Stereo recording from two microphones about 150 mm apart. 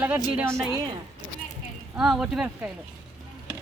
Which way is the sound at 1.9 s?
5° right (ahead or behind).